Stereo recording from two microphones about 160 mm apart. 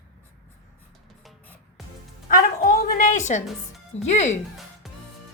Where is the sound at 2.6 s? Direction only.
50° left (ahead or behind).